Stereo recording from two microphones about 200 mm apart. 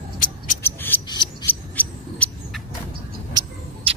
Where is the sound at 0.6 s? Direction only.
10° left (ahead or behind).